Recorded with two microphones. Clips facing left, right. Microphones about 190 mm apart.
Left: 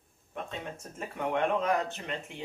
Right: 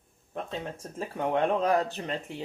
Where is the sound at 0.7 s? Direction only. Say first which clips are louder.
Right 4 dB; 35° right (ahead or behind).